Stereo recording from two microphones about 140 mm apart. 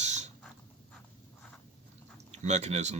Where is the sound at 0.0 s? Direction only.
50° right (ahead or behind).